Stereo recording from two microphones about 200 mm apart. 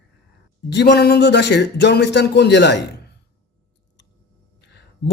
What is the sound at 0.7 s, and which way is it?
Speech, 55° left (ahead or behind).